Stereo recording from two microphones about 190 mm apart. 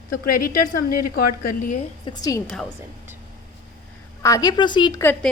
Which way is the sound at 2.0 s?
20° left (ahead or behind).